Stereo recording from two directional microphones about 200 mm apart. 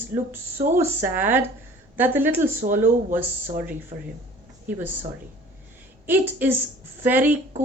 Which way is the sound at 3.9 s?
35° right (ahead or behind).